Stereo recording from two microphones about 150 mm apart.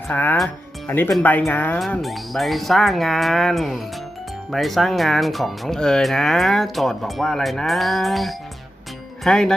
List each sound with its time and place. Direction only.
0.1 s speech: 15° left (ahead or behind)
1.8 s speech: centre (ahead or behind)